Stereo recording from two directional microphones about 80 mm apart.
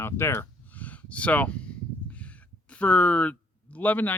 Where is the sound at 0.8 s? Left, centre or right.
Centre.